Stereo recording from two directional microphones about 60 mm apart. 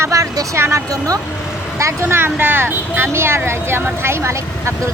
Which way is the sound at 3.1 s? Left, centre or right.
Right.